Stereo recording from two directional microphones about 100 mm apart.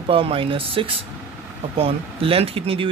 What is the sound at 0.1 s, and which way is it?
Speech, 65° right (ahead or behind).